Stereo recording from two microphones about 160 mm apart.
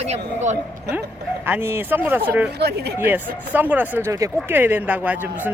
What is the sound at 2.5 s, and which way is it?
Speech, 90° right.